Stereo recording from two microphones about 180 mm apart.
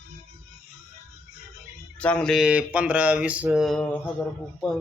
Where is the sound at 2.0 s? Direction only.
5° left (ahead or behind).